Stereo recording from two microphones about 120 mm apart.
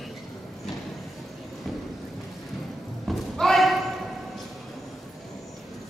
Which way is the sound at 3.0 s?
Centre (ahead or behind).